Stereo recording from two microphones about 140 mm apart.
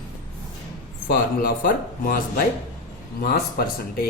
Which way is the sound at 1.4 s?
85° left.